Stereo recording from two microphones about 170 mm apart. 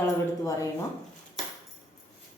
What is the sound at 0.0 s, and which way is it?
Speech, 20° left (ahead or behind).